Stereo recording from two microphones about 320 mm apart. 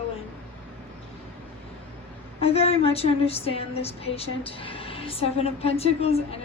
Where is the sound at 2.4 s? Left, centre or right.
Centre.